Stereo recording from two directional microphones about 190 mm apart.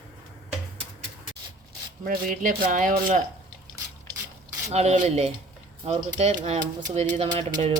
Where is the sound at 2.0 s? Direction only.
45° right (ahead or behind).